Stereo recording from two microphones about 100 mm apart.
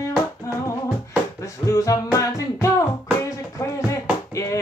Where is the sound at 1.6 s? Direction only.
35° left (ahead or behind).